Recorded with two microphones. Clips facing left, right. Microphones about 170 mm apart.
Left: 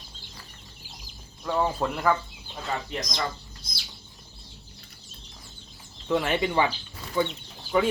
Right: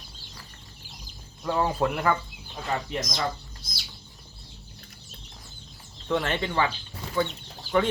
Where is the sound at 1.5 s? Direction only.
5° right (ahead or behind).